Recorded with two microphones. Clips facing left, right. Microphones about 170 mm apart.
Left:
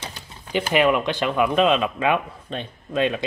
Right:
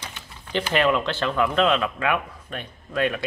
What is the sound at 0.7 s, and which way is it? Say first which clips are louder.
A man's voice: left 2 dB; 15° left (ahead or behind).